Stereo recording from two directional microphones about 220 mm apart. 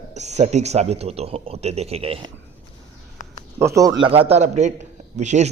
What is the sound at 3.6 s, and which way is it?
Speech, 15° right (ahead or behind).